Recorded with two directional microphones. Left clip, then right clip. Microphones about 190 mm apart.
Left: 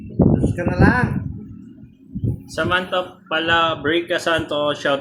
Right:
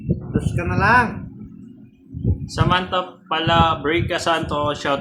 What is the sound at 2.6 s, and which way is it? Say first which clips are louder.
Speech: even; 20° right (ahead or behind).